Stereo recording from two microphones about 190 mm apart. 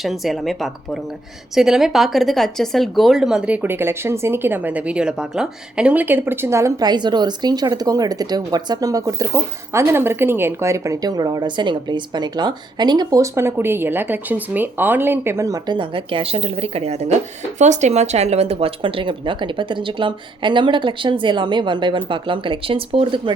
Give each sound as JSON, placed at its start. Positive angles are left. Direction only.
{"t": 0.0, "sound": "speech", "side_deg": 0}